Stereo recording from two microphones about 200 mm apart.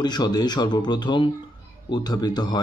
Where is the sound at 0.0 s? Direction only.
20° left (ahead or behind).